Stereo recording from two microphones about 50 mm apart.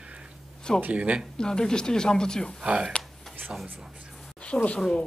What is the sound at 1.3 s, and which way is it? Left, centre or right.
Speech, centre.